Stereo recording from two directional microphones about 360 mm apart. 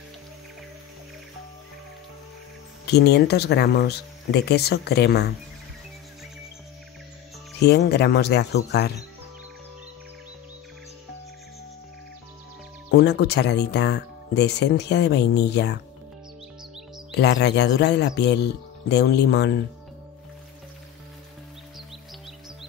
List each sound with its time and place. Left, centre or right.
2.9 s speech: left
7.6 s speech: left
12.9 s speech: left
17.1 s speech: left